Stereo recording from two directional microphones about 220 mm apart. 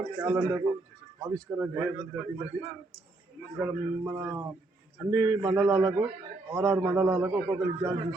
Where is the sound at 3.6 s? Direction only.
15° right (ahead or behind).